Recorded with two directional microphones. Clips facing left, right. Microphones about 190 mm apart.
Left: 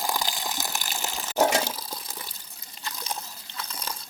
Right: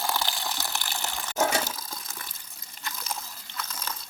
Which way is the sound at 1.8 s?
30° left (ahead or behind).